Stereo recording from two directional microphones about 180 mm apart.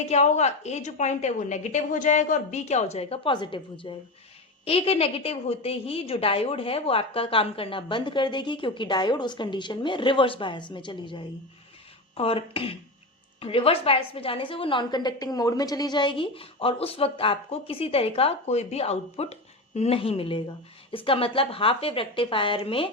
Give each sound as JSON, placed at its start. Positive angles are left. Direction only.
{"t": 0.1, "sound": "a woman's voice", "side_deg": 40}